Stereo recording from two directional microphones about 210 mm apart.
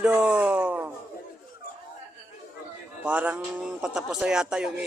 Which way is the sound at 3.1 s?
5° right (ahead or behind).